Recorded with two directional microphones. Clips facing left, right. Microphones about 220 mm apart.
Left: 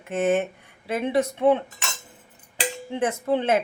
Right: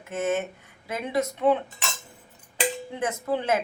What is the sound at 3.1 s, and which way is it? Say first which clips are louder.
Speech: left 3 dB; 25° left (ahead or behind).